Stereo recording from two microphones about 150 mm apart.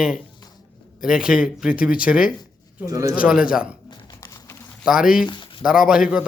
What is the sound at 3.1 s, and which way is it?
Speech, 5° right (ahead or behind).